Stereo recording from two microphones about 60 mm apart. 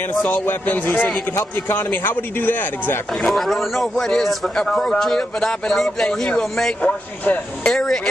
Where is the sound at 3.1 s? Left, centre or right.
Centre.